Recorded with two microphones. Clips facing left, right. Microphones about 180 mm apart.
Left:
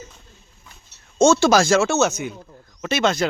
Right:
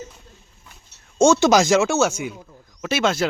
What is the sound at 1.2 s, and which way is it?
Speech, 15° right (ahead or behind).